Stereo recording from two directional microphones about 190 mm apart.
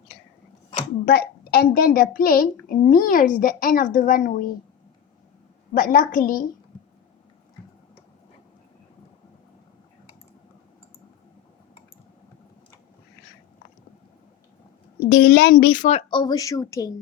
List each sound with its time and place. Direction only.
1.0 s a woman's voice: 55° left (ahead or behind)
5.7 s a woman's voice: 45° left (ahead or behind)
15.1 s a woman's voice: 60° left (ahead or behind); by 16.9 s 15° left (ahead or behind)